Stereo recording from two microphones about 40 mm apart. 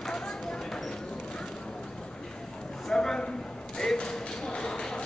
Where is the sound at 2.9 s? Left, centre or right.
Centre.